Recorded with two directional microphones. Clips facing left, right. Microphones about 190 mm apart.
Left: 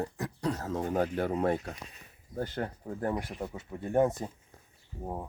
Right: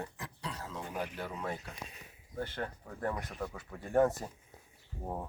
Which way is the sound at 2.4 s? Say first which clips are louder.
Left 4 dB; 35° left (ahead or behind).